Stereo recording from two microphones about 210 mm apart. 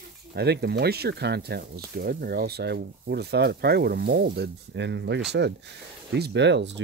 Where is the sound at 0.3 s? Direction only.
50° right (ahead or behind).